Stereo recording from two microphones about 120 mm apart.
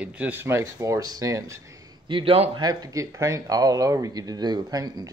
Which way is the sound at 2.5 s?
35° right (ahead or behind).